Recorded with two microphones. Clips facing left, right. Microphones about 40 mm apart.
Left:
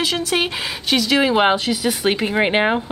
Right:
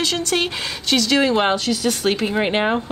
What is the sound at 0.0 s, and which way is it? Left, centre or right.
Speech, centre.